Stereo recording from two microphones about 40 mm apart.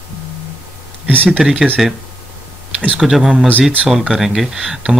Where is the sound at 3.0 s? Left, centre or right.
Centre.